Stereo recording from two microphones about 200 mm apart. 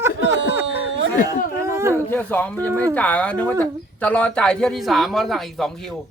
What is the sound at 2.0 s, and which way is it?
Speech, 10° left (ahead or behind).